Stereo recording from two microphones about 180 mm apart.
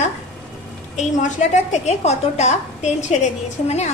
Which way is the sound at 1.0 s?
45° left (ahead or behind).